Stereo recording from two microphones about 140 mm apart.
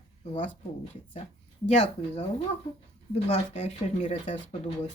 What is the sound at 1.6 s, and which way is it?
Speech, 45° left (ahead or behind).